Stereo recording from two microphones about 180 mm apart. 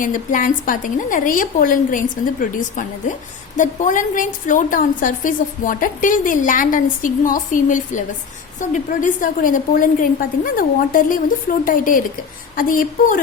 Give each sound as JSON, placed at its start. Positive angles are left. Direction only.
{"t": 0.0, "sound": "a woman's voice", "side_deg": 50}